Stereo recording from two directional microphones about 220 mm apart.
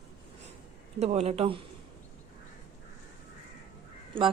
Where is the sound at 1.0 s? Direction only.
30° right (ahead or behind).